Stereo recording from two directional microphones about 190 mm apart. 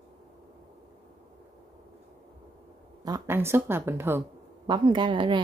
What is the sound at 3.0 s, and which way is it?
Speech, 15° right (ahead or behind).